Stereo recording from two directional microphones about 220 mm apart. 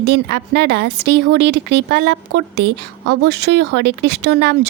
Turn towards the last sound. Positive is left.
turn(degrees=-50)  # may be behind; listen again after turning